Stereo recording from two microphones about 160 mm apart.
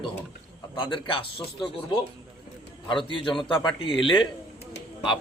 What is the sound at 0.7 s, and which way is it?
Speech, 30° left (ahead or behind).